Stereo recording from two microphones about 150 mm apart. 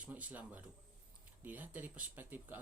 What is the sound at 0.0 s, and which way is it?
Speech, 10° right (ahead or behind).